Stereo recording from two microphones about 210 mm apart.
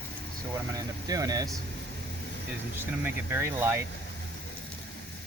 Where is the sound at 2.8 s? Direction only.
10° right (ahead or behind).